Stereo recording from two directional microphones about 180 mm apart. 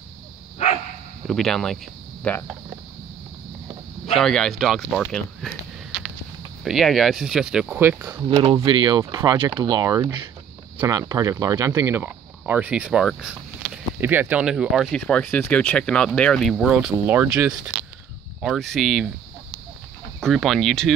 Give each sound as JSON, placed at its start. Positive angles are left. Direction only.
{"t": 1.2, "sound": "speech", "side_deg": 0}
{"t": 4.1, "sound": "speech", "side_deg": 5}
{"t": 6.6, "sound": "speech", "side_deg": 0}
{"t": 20.2, "sound": "speech", "side_deg": 0}